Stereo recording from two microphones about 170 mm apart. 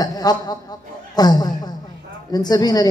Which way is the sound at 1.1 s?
25° left (ahead or behind).